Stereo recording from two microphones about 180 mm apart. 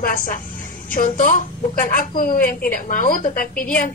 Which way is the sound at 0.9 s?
45° left (ahead or behind).